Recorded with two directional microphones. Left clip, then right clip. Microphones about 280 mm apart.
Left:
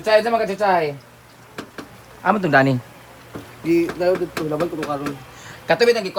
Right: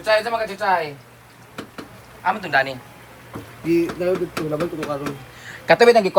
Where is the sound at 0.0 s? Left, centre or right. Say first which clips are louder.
Left 3 dB; left.